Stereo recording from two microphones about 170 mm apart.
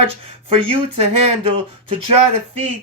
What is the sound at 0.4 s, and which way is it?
Speech, 35° right (ahead or behind).